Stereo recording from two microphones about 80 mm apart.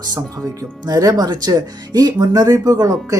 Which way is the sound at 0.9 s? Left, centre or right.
Right.